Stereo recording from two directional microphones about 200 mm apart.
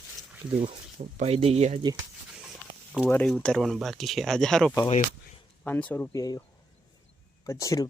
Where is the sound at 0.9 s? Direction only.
30° right (ahead or behind).